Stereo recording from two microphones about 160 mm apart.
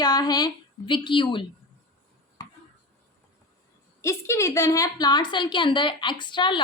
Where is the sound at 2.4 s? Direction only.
20° left (ahead or behind).